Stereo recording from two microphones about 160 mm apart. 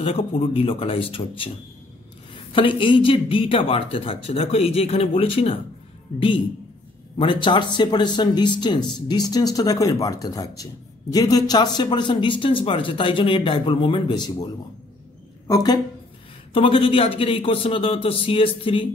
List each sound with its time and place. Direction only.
0.0 s a woman's voice: 35° left (ahead or behind)